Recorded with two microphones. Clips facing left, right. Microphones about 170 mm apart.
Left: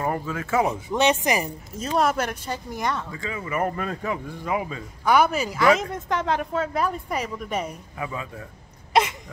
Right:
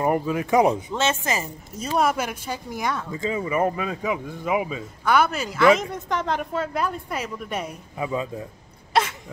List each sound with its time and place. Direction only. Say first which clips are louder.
0.0 s speech: right 5 dB; 15° right (ahead or behind)
0.9 s speech: left 3 dB; 15° left (ahead or behind)
1.8 s a woman's voice: even; 5° right (ahead or behind)
3.1 s speech: right 5 dB; 20° right (ahead or behind)
5.0 s a woman's voice: left 1 dB; 10° left (ahead or behind); by 8.1 s 10° right (ahead or behind)
8.1 s a man's voice: right 7 dB; 25° right (ahead or behind)